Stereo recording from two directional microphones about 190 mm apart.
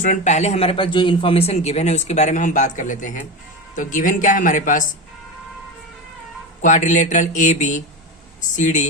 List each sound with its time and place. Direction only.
0.0 s a man's voice: 40° left (ahead or behind)
6.6 s a man's voice: 40° left (ahead or behind)